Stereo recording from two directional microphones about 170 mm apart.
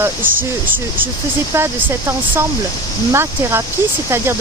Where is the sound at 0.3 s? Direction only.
55° right (ahead or behind).